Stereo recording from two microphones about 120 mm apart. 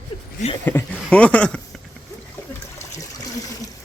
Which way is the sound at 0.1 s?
50° left (ahead or behind).